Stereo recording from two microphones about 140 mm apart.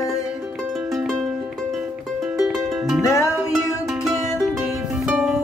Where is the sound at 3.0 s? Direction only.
20° left (ahead or behind).